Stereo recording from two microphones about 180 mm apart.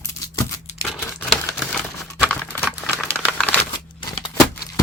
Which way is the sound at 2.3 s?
10° left (ahead or behind).